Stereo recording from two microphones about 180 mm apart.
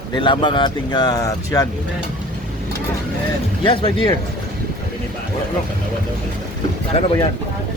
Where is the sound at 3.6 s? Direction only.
25° left (ahead or behind).